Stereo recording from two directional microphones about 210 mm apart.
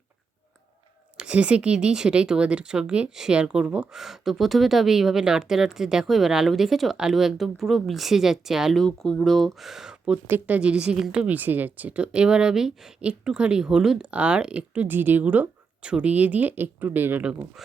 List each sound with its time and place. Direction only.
1.1 s speech: 5° right (ahead or behind)